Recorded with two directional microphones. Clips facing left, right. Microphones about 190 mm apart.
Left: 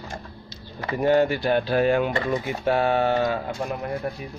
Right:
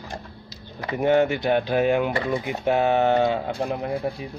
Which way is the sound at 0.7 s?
15° right (ahead or behind).